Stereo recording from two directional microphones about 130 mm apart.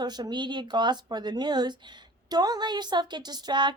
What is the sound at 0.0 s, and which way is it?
A woman's voice, 35° right (ahead or behind).